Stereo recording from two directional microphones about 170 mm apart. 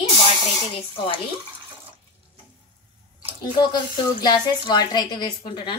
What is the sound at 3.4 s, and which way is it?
A woman's voice, 25° left (ahead or behind).